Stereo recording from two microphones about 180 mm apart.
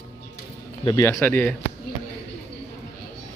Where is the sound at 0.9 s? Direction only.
15° left (ahead or behind).